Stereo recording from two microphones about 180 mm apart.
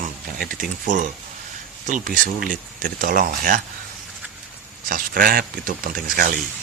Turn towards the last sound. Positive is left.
turn(degrees=-55)  # may be behind; listen again after turning